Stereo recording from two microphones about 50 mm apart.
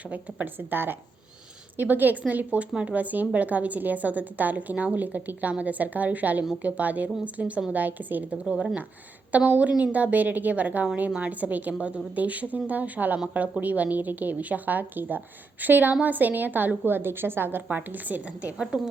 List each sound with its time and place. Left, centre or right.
0.1 s a woman's voice: right
8.4 s speech: centre
9.3 s a woman's voice: right
17.7 s a woman's voice: right
18.5 s speech: centre